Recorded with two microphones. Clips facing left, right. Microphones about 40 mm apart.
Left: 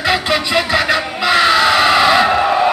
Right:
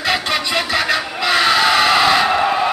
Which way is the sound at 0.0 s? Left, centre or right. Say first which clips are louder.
Left 3 dB; centre.